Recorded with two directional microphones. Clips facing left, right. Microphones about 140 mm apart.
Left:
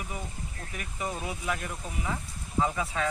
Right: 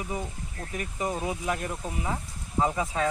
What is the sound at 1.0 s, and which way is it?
Speech, 20° right (ahead or behind).